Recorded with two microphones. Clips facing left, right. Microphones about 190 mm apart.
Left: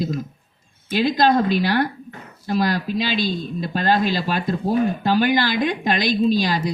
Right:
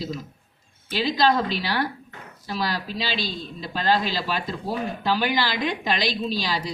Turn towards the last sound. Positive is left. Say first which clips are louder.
# left 8 dB
turn(degrees=50)  # may be behind; listen again after turning